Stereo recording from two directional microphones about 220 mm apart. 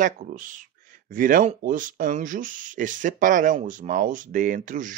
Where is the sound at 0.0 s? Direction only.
35° right (ahead or behind).